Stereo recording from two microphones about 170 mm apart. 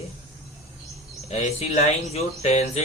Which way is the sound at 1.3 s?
40° left (ahead or behind).